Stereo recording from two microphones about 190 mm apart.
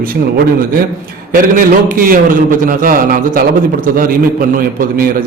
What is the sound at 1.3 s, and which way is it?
A man's voice, 45° right (ahead or behind).